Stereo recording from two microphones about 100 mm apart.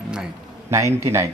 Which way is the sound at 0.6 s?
30° right (ahead or behind).